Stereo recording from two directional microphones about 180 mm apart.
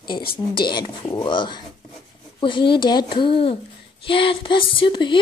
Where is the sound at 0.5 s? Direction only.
25° left (ahead or behind).